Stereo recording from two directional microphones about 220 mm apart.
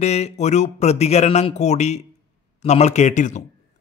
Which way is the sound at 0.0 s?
30° left (ahead or behind).